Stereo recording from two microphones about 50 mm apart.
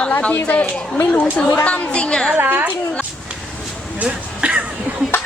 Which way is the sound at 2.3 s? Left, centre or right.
Right.